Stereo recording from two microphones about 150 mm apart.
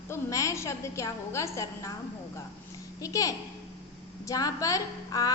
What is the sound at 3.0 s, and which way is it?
A woman's voice, 20° left (ahead or behind).